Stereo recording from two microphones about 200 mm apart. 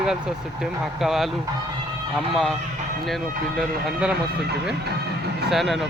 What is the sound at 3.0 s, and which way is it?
Speech, centre (ahead or behind).